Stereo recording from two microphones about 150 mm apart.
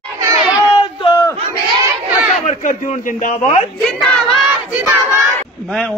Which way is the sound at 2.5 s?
60° left (ahead or behind).